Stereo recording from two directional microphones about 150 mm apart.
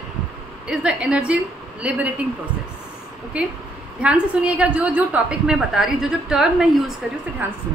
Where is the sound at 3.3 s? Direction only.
5° right (ahead or behind).